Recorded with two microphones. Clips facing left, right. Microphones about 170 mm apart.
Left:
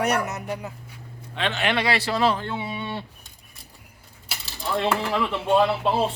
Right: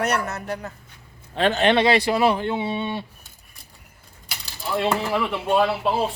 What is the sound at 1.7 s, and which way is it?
Speech, 20° right (ahead or behind).